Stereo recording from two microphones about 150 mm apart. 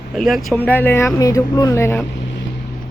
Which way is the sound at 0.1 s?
Centre (ahead or behind).